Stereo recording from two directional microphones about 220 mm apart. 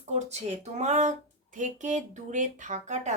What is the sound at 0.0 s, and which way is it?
Speech, 30° right (ahead or behind).